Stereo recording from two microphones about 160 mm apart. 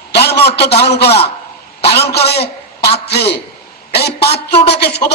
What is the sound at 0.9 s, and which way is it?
A man's voice, 90° left.